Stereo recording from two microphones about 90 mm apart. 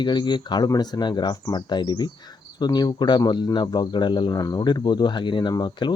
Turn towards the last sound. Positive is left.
turn(degrees=50)  # may be behind; listen again after turning